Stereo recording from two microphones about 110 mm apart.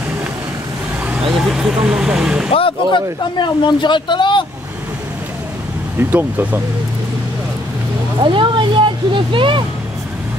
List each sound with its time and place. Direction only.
1.3 s vehicle: 5° right (ahead or behind)
2.5 s speech: 50° left (ahead or behind)
5.9 s speech: 15° right (ahead or behind)
8.2 s speech: 50° right (ahead or behind)